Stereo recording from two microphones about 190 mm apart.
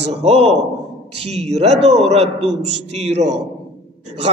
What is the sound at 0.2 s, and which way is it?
A man's voice, 35° right (ahead or behind).